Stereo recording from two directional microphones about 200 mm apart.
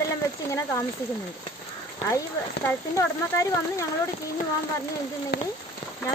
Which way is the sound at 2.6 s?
15° left (ahead or behind).